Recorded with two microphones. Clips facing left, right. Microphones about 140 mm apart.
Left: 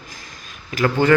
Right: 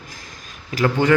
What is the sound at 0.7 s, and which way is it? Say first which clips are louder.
Speech: even; 35° right (ahead or behind).